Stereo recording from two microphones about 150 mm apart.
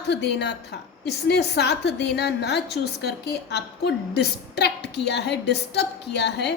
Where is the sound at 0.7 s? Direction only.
90° left.